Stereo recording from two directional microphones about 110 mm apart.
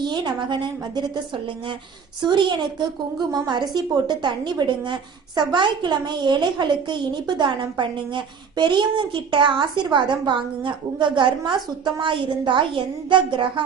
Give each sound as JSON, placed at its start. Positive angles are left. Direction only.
{"t": 0.0, "sound": "a woman's voice", "side_deg": -45}